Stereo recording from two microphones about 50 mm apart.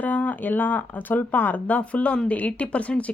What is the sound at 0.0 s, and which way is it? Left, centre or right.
Speech, left.